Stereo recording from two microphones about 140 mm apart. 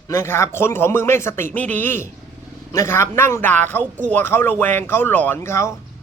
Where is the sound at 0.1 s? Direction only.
20° left (ahead or behind).